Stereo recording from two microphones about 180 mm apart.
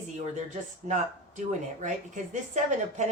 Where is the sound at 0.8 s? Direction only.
40° right (ahead or behind).